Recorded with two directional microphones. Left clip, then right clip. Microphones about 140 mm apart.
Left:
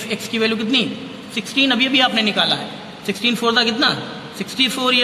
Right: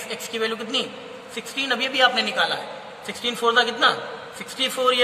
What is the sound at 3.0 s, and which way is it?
A man's voice, 10° left (ahead or behind).